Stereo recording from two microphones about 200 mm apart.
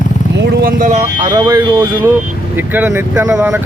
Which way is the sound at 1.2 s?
20° right (ahead or behind).